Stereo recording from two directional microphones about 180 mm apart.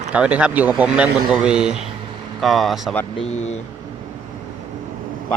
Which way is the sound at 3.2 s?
40° left (ahead or behind).